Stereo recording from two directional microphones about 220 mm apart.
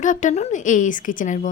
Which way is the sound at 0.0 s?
35° left (ahead or behind).